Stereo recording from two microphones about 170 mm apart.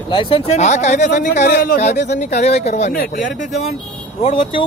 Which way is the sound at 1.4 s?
65° left (ahead or behind).